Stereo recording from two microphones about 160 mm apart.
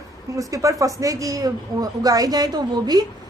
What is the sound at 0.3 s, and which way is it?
Speech, 20° right (ahead or behind).